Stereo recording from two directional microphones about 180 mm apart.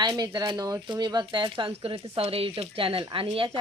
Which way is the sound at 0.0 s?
20° right (ahead or behind).